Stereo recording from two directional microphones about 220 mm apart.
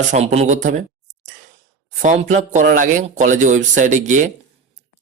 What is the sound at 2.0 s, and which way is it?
Speech, 35° right (ahead or behind).